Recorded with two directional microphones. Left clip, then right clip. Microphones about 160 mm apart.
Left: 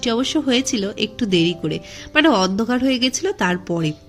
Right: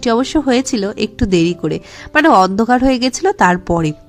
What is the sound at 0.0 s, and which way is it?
A woman's voice, 35° right (ahead or behind).